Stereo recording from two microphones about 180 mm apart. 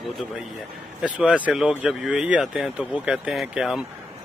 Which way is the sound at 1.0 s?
5° right (ahead or behind).